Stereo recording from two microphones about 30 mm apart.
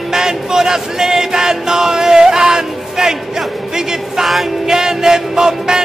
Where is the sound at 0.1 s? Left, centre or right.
Centre.